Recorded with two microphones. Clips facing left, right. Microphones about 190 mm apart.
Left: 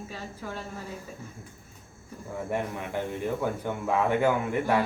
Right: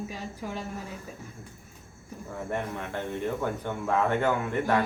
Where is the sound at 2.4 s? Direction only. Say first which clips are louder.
Left 1 dB; 10° left (ahead or behind).